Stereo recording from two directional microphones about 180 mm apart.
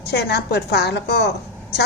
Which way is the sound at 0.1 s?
65° left (ahead or behind).